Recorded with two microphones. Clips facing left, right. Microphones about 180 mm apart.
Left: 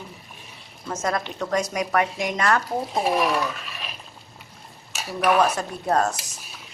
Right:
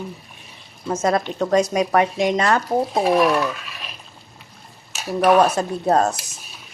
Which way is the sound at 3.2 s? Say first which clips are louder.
Right 5 dB; centre (ahead or behind).